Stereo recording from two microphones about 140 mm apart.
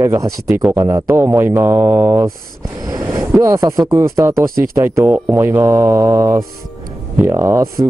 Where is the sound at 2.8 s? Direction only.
25° right (ahead or behind).